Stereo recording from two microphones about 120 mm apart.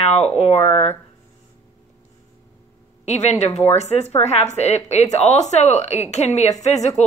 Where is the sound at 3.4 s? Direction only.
65° left (ahead or behind).